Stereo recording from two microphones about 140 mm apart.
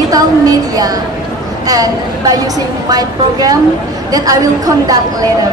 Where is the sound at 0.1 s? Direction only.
25° right (ahead or behind).